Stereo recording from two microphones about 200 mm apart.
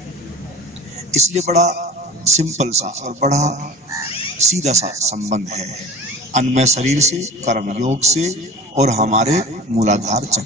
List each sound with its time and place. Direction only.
1.1 s a man's voice: 35° right (ahead or behind)